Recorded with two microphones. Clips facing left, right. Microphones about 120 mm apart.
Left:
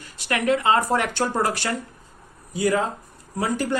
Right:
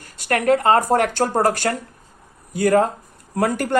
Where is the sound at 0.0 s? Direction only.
45° right (ahead or behind).